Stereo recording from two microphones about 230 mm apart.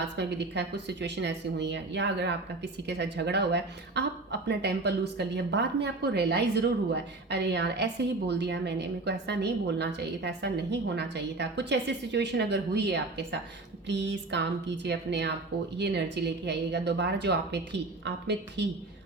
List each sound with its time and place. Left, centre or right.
0.0 s speech: right